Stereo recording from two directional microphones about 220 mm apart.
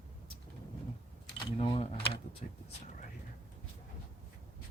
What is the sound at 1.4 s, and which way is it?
Speech, 25° left (ahead or behind).